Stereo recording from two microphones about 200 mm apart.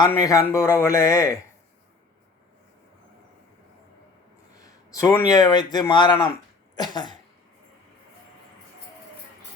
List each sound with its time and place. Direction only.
0.1 s speech: 15° left (ahead or behind)
4.6 s speech: 15° left (ahead or behind)
6.7 s cough: 20° left (ahead or behind)